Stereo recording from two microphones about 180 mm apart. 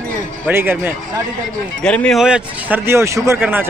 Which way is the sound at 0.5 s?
10° right (ahead or behind).